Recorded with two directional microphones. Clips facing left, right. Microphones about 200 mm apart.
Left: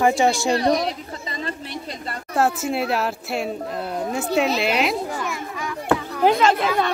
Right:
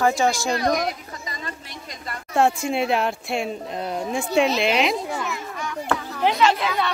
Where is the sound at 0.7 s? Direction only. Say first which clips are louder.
Left 2 dB; 30° left (ahead or behind).